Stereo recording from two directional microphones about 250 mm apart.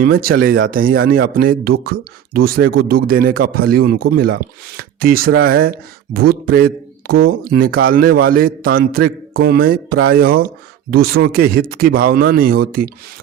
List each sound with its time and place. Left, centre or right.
0.0 s a man's voice: right